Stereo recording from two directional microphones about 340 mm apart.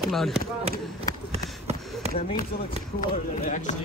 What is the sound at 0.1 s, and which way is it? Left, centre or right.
Speech, centre.